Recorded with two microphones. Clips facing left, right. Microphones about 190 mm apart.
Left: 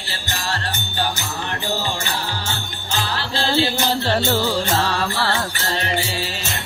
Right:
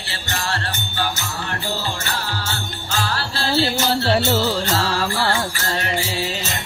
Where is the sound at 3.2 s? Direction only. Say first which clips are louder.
Left 2 dB; 15° left (ahead or behind).